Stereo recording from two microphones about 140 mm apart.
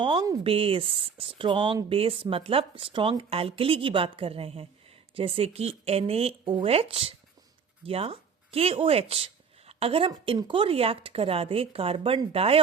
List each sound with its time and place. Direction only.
0.0 s speech: 30° right (ahead or behind)
0.4 s speech: 40° right (ahead or behind)